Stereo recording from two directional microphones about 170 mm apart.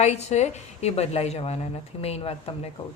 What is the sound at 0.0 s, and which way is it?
Speech, 40° left (ahead or behind).